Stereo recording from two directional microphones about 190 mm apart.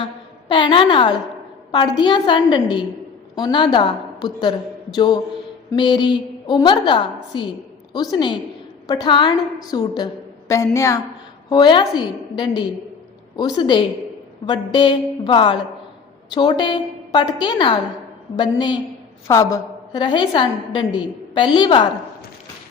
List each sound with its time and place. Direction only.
0.0 s a woman's voice: 25° left (ahead or behind)